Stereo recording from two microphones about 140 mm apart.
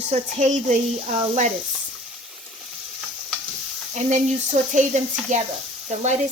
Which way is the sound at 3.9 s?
55° right (ahead or behind).